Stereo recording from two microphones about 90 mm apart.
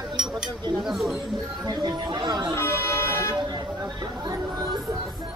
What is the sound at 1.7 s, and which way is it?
Speech, 55° right (ahead or behind).